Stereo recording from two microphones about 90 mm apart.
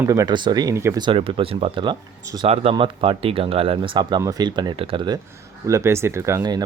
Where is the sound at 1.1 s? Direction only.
90° right; by 4.2 s 65° right (ahead or behind).